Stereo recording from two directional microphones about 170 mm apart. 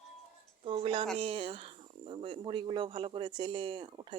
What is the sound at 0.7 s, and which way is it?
Speech, 30° right (ahead or behind).